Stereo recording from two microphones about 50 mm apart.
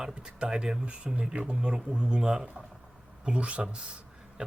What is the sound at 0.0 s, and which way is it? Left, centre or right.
Speech, centre.